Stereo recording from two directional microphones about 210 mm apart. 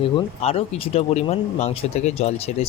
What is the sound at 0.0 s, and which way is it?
Speech, 30° left (ahead or behind).